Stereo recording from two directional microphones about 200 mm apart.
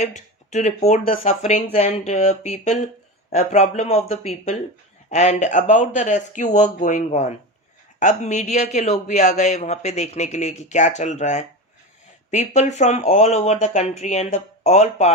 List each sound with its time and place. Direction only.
0.0 s a man's voice: 35° left (ahead or behind)